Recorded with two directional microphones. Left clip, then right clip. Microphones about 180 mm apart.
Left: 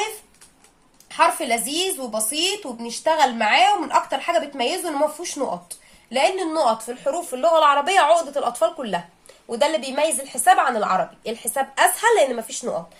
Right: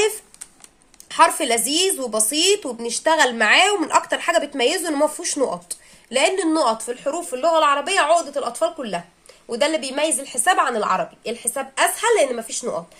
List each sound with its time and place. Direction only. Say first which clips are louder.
1.1 s a woman's voice: right 3 dB; 45° right (ahead or behind); by 9.0 s 5° right (ahead or behind)
9.5 s a woman's voice: even; 15° right (ahead or behind)